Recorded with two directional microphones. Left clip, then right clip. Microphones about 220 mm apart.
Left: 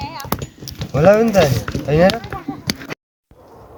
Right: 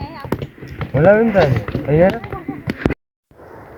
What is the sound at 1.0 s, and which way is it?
Speech, 40° left (ahead or behind).